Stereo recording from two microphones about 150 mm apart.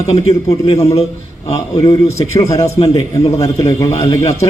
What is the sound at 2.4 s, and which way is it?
A man's voice, 20° left (ahead or behind).